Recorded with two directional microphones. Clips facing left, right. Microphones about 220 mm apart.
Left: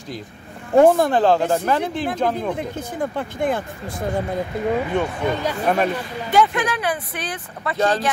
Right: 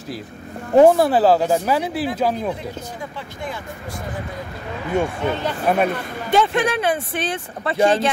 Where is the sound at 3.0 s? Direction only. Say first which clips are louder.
Left 12 dB; 55° left (ahead or behind).